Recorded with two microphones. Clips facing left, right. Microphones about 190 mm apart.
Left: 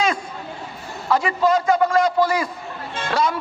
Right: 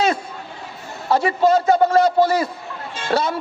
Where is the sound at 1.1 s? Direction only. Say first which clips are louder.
Right 2 dB; 30° right (ahead or behind).